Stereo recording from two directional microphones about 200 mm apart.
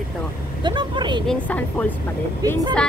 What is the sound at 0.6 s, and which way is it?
Speech, 25° right (ahead or behind).